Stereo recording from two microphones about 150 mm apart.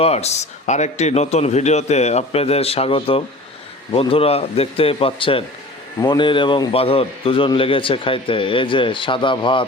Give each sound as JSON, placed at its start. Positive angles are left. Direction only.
{"t": 0.0, "sound": "a man's voice", "side_deg": 45}